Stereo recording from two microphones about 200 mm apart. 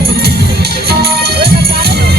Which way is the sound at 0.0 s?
50° right (ahead or behind).